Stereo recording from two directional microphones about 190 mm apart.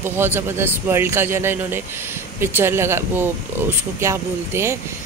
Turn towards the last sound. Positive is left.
turn(degrees=-15)  # may be behind; listen again after turning